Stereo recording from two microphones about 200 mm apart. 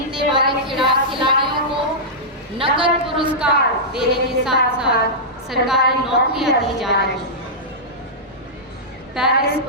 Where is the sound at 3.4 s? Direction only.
5° right (ahead or behind).